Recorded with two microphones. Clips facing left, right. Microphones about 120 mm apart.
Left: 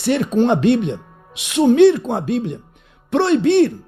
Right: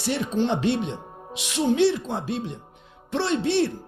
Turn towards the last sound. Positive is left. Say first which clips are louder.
# left 9 dB
turn(degrees=60)  # may be behind; listen again after turning